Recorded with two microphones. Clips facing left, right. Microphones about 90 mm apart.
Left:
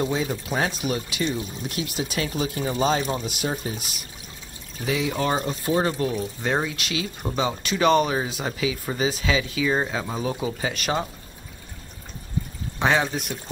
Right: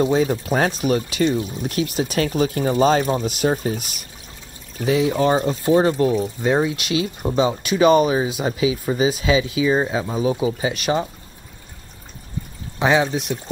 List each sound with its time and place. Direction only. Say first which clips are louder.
0.2 s speech: right 6 dB; 50° right (ahead or behind)
4.8 s speech: right 7 dB; 35° right (ahead or behind)
6.4 s speech: right 6 dB; 10° right (ahead or behind)
6.8 s speech: right 6 dB; 25° right (ahead or behind); by 11.1 s 5° right (ahead or behind)
12.7 s speech: right 4 dB; 5° right (ahead or behind)